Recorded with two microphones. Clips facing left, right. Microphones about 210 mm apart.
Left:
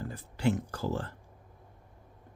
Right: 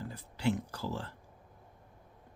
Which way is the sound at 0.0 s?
50° left (ahead or behind).